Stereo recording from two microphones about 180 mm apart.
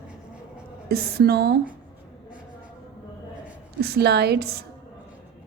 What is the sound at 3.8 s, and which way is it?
Speech, 65° right (ahead or behind).